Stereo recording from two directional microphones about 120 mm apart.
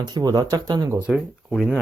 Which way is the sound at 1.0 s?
5° right (ahead or behind).